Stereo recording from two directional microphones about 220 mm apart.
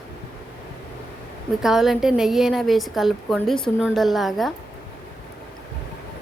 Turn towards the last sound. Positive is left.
turn(degrees=0)  # may be behind; listen again after turning